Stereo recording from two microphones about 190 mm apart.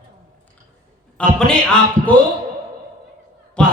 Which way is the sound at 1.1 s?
5° left (ahead or behind).